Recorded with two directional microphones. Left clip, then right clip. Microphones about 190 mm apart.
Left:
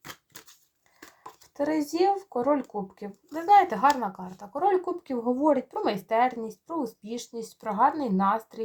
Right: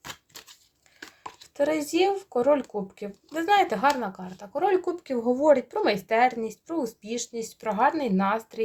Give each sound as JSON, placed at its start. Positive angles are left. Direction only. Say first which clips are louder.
{"t": 1.5, "sound": "speech", "louder": "right 2 dB", "side_deg": -20}